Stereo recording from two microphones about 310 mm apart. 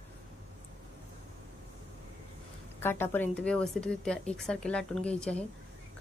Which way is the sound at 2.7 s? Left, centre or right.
Centre.